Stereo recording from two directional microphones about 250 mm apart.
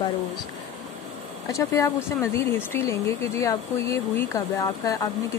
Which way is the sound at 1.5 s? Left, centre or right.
Centre.